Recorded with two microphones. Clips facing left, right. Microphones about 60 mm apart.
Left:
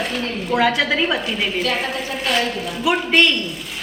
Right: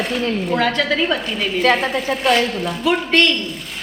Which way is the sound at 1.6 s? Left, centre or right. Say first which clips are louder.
Right 6 dB; right.